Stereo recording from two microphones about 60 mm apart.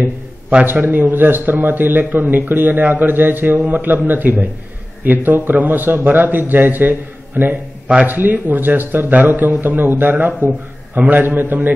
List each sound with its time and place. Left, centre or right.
0.0 s a man's voice: right